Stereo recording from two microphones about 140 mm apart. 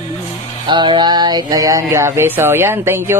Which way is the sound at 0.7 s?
35° right (ahead or behind).